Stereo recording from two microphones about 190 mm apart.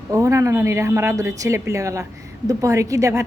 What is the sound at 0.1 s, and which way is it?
Speech, 15° right (ahead or behind).